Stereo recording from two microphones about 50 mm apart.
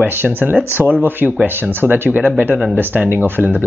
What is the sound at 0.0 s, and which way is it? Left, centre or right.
Speech, right.